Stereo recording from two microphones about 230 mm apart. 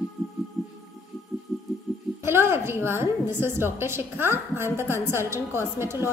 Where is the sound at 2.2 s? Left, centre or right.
Centre.